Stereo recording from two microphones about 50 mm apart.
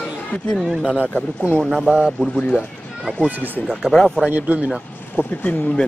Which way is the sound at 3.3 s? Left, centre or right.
Right.